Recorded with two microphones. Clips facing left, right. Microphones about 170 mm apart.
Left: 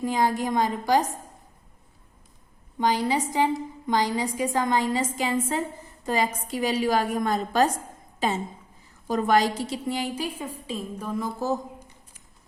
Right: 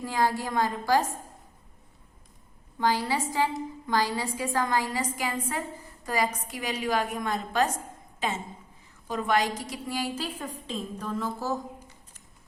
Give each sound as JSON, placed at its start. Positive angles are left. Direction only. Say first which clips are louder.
{"t": 0.0, "sound": "a woman's voice", "louder": "left 3 dB", "side_deg": 20}
{"t": 2.7, "sound": "a woman's voice", "louder": "left 3 dB", "side_deg": 20}
{"t": 9.0, "sound": "a woman's voice", "louder": "left 5 dB", "side_deg": 40}